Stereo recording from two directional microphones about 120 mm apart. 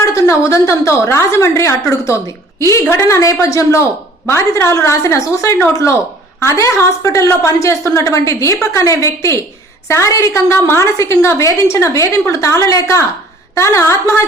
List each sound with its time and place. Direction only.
0.1 s a woman's voice: 25° left (ahead or behind)